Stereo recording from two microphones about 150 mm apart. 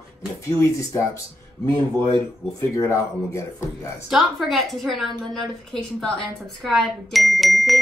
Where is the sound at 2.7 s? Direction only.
20° left (ahead or behind).